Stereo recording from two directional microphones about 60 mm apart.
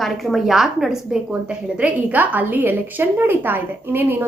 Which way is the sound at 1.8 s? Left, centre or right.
Right.